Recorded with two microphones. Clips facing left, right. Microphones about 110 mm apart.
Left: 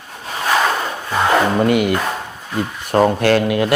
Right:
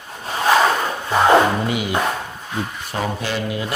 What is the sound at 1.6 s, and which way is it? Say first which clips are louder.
Speech: left 8 dB; 60° left (ahead or behind).